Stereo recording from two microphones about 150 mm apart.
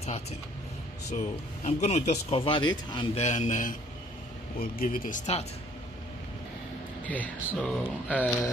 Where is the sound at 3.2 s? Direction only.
50° left (ahead or behind).